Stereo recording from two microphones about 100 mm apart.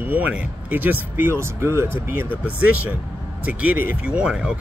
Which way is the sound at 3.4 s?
15° right (ahead or behind).